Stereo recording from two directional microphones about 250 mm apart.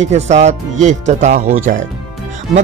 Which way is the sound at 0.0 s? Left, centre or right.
Right.